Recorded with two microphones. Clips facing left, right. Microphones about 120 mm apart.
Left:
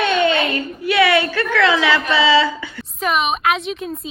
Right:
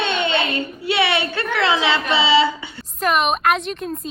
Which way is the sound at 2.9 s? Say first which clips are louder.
Right 1 dB; centre (ahead or behind).